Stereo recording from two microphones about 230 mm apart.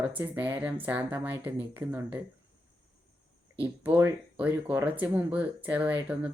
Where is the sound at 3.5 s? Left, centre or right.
Centre.